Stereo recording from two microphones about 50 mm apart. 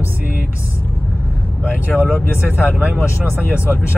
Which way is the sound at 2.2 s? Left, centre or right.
Left.